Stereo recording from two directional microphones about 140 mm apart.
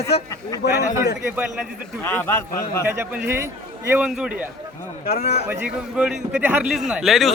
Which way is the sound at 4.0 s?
5° right (ahead or behind).